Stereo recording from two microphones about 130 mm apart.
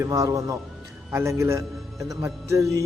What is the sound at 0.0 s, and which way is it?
A man's voice, 25° right (ahead or behind).